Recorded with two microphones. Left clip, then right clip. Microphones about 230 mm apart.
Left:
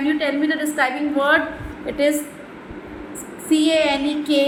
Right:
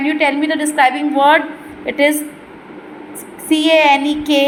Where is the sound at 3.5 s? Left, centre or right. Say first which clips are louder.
Right 7 dB; right.